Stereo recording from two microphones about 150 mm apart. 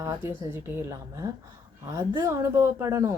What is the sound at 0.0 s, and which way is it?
A woman's voice, 15° right (ahead or behind).